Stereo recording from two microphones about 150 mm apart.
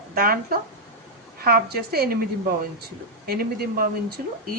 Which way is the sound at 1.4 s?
90° right.